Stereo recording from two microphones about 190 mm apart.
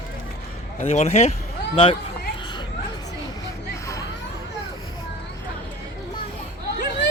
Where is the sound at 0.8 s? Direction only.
35° left (ahead or behind).